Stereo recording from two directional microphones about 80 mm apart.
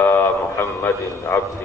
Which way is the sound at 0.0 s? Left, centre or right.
Left.